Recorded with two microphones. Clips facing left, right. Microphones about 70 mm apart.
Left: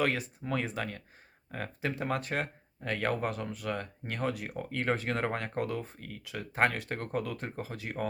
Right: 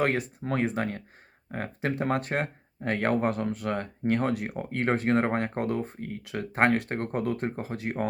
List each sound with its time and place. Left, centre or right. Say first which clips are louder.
0.0 s speech: right 4 dB; right